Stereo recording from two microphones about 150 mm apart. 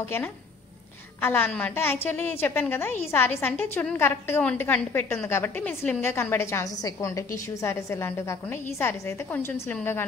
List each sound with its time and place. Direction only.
1.2 s a woman's voice: 15° left (ahead or behind)